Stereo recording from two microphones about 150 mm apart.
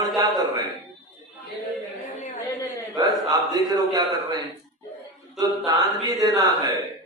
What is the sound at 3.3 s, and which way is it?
A man's voice, 25° right (ahead or behind).